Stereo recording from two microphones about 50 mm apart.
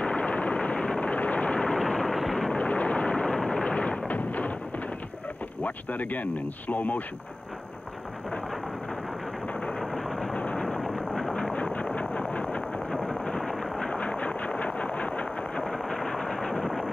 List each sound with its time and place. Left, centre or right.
0.0 s vehicle: left
1.1 s vehicle: left; by 2.6 s centre
2.6 s vehicle: left
3.3 s a sound: centre
5.6 s speech: left
9.6 s vehicle: centre
9.8 s vehicle: centre
10.3 s vehicle: left
11.1 s a sound: centre
11.5 s vehicle: left
12.9 s a sound: centre
13.9 s vehicle: left
15.6 s vehicle: centre